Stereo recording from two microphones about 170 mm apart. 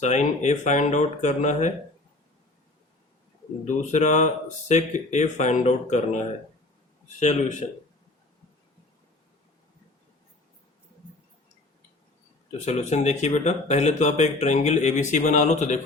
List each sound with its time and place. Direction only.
0.0 s speech: 45° left (ahead or behind)
3.7 s speech: 45° left (ahead or behind)
12.5 s speech: 40° left (ahead or behind)